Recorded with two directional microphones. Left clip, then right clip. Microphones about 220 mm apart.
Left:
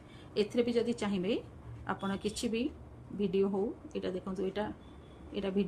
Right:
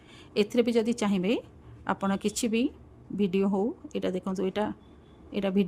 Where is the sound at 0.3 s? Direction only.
50° right (ahead or behind).